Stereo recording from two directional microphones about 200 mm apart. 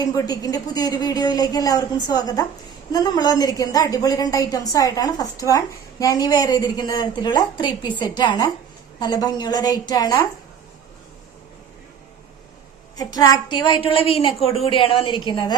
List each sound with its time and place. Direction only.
0.0 s a woman's voice: 20° left (ahead or behind)
13.0 s a woman's voice: 20° left (ahead or behind)